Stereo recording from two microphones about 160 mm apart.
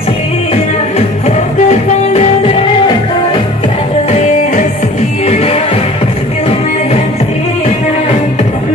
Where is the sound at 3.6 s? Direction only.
45° left (ahead or behind).